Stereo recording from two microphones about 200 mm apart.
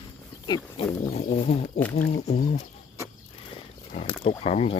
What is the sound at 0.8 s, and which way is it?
Speech, 25° left (ahead or behind).